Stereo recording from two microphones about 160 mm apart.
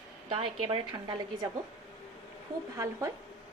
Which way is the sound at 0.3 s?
30° right (ahead or behind).